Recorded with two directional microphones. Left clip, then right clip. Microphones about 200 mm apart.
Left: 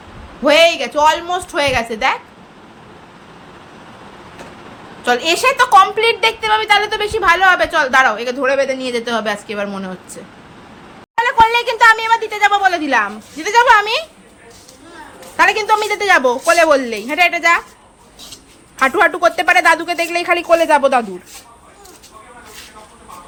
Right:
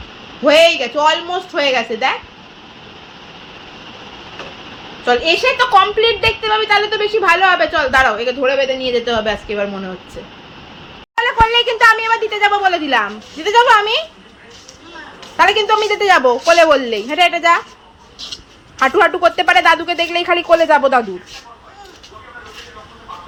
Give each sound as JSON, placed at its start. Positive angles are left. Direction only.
{"t": 0.4, "sound": "a woman's voice", "side_deg": 10}
{"t": 5.0, "sound": "a woman's voice", "side_deg": 15}
{"t": 11.2, "sound": "a woman's voice", "side_deg": 15}
{"t": 15.4, "sound": "a woman's voice", "side_deg": 15}
{"t": 18.8, "sound": "a woman's voice", "side_deg": 20}